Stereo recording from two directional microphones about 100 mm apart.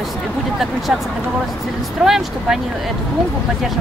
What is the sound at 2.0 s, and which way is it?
Speech, 5° right (ahead or behind).